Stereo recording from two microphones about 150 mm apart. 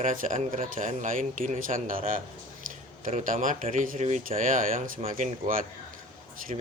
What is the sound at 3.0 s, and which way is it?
Speech, 60° right (ahead or behind).